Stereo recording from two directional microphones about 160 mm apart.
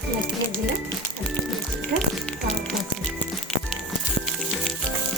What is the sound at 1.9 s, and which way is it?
Music, 60° right (ahead or behind).